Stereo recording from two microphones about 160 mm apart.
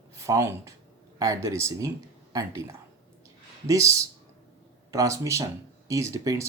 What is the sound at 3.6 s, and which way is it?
Speech, 20° right (ahead or behind).